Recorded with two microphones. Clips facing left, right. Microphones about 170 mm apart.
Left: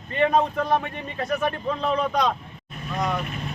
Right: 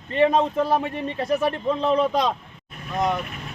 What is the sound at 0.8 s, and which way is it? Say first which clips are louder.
Speech: right 4 dB; 30° right (ahead or behind).